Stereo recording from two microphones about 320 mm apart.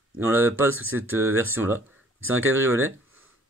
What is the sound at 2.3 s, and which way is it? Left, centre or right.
Speech, right.